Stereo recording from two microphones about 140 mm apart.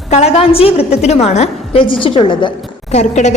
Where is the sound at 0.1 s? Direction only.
50° left (ahead or behind).